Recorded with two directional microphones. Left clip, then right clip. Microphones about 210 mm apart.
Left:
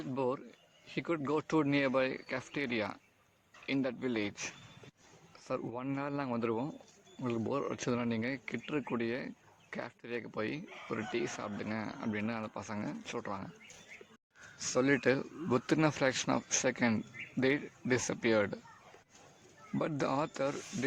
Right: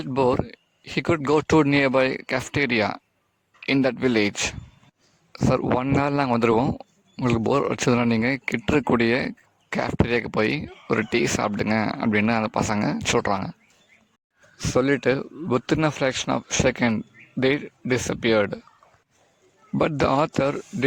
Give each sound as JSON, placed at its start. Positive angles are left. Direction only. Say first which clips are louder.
{"t": 0.0, "sound": "speech", "louder": "right 14 dB", "side_deg": -55}
{"t": 14.6, "sound": "speech", "louder": "right 9 dB", "side_deg": -40}
{"t": 19.8, "sound": "speech", "louder": "right 13 dB", "side_deg": -45}